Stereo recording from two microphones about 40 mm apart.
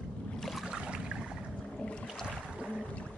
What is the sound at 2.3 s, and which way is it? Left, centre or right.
Boat, right.